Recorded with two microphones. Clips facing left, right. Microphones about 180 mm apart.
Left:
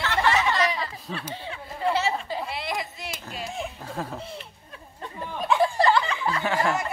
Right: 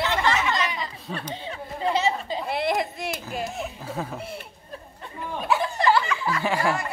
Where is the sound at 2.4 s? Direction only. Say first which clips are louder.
Right 6 dB; 50° right (ahead or behind).